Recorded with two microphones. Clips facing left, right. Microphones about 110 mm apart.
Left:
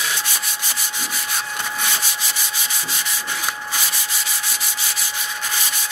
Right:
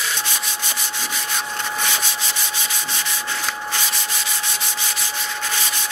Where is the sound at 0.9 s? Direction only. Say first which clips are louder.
Even; 5° left (ahead or behind).